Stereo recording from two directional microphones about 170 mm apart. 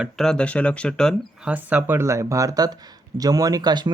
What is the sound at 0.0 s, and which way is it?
Speech, 5° left (ahead or behind).